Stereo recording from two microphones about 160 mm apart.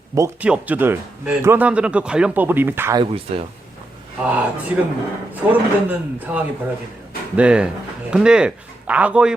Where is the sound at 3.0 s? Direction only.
35° right (ahead or behind).